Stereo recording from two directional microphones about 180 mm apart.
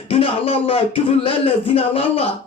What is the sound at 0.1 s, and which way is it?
Speech, 30° left (ahead or behind).